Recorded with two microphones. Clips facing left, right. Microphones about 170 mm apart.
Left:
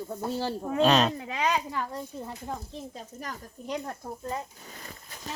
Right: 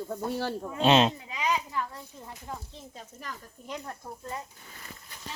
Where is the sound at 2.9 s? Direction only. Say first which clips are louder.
Left 3 dB; 40° left (ahead or behind).